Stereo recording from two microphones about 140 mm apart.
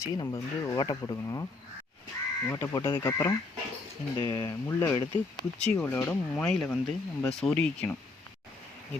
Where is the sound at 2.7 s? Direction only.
35° left (ahead or behind).